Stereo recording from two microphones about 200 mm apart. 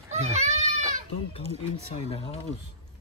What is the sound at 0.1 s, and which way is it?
Children playing, 35° right (ahead or behind).